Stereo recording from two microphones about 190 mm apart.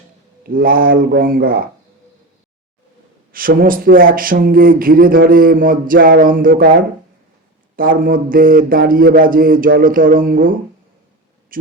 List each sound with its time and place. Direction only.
0.4 s speech: 50° right (ahead or behind)
3.3 s speech: 50° right (ahead or behind)
7.8 s speech: 45° right (ahead or behind)
11.5 s speech: 50° right (ahead or behind)